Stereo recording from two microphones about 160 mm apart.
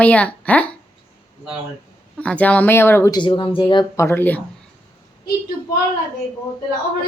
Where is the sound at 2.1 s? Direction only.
10° left (ahead or behind).